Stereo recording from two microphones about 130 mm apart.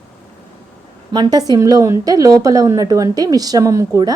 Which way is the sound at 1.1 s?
30° right (ahead or behind).